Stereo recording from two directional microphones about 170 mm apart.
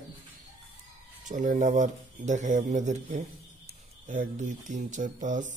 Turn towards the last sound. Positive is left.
turn(degrees=-50)  # may be behind; listen again after turning